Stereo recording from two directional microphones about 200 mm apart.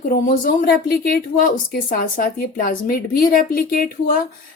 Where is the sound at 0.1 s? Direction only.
50° left (ahead or behind).